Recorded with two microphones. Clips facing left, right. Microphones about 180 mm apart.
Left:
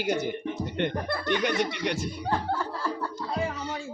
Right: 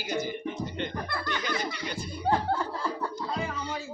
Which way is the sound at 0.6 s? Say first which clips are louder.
Left 5 dB; 65° left (ahead or behind).